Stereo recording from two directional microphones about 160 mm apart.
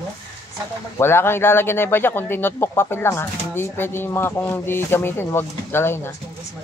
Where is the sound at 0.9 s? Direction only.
15° left (ahead or behind).